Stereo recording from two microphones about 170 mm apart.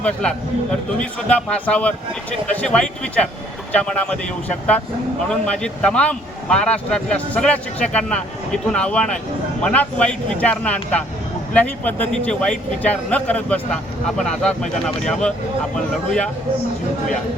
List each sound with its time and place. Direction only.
0.0 s speech: 5° left (ahead or behind)